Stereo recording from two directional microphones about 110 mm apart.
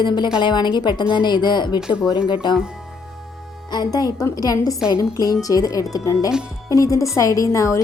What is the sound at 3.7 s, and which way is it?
A woman's voice, 35° left (ahead or behind).